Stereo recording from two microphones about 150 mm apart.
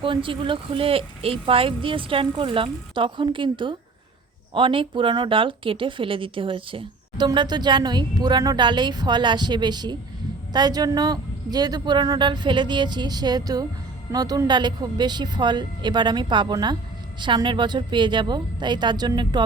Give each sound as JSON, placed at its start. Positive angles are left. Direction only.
{"t": 0.0, "sound": "a woman's voice", "side_deg": -35}